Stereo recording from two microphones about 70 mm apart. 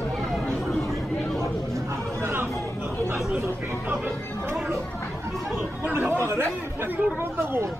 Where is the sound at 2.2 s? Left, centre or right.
Right.